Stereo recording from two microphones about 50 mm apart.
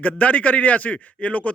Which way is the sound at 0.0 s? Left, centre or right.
Left.